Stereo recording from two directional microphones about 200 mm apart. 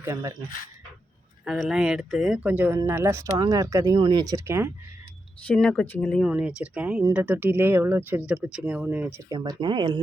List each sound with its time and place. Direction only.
0.0 s speech: 15° right (ahead or behind)
1.5 s speech: centre (ahead or behind)
5.5 s speech: 5° left (ahead or behind); by 10.0 s 20° right (ahead or behind)